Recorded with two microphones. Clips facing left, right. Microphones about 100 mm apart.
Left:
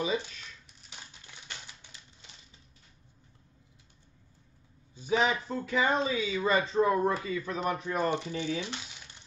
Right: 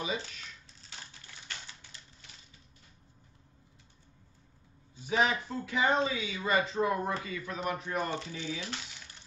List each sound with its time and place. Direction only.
0.2 s crumpling: 15° left (ahead or behind)
5.0 s speech: 30° left (ahead or behind)